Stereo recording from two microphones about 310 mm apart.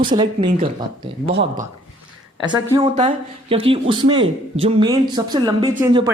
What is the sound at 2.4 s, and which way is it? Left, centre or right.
Speech, centre.